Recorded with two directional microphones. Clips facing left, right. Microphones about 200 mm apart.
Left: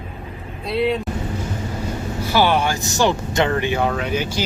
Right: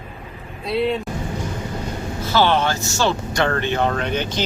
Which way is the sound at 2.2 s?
10° left (ahead or behind).